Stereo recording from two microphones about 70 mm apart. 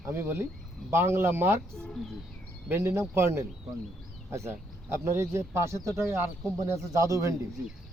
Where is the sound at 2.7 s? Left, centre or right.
Right.